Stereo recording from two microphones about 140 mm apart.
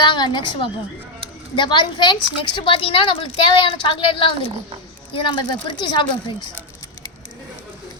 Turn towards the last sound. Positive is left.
turn(degrees=35)  # may be behind; listen again after turning